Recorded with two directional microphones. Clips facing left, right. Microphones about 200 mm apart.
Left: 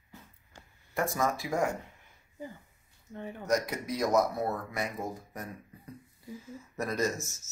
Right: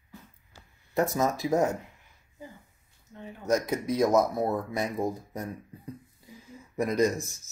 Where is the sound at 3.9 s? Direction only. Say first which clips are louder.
Right 4 dB; 25° right (ahead or behind).